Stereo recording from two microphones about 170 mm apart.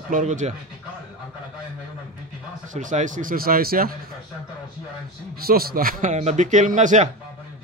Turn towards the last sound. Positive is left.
turn(degrees=-45)  # may be behind; listen again after turning